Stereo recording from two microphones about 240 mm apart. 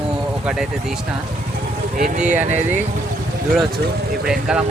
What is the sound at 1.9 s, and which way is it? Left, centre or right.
Speech, right.